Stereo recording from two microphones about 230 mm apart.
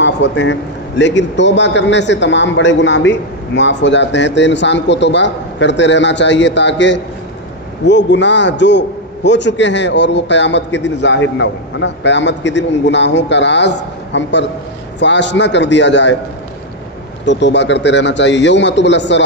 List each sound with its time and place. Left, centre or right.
0.0 s a man's voice: left
17.2 s a man's voice: left